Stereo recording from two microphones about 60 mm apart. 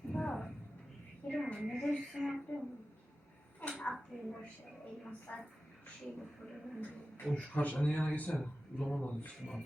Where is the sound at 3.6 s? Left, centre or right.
Left.